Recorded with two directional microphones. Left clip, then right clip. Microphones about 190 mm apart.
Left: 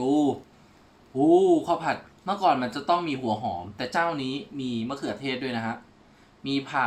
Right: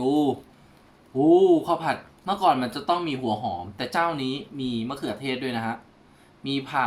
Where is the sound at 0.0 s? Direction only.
Centre (ahead or behind).